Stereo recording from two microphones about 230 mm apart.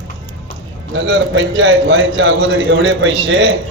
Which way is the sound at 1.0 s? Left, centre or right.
Right.